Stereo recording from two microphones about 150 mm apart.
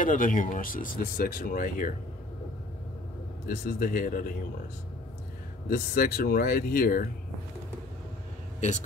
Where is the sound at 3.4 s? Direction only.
70° left (ahead or behind).